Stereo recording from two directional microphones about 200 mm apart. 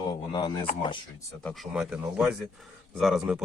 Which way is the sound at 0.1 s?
20° left (ahead or behind).